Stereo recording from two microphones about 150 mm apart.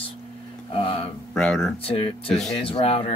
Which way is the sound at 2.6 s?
40° left (ahead or behind).